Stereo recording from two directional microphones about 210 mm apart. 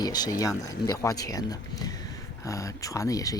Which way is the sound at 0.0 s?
20° left (ahead or behind).